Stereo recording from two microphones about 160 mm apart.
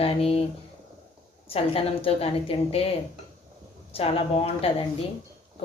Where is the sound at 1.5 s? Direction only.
35° left (ahead or behind).